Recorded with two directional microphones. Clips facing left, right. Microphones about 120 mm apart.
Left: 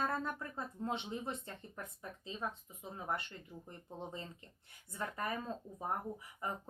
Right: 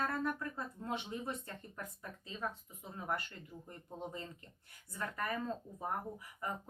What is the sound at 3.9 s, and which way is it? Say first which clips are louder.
Speech: right 1 dB; 25° left (ahead or behind).